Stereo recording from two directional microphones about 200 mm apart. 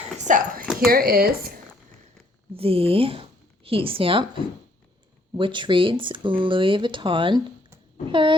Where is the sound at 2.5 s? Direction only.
30° right (ahead or behind).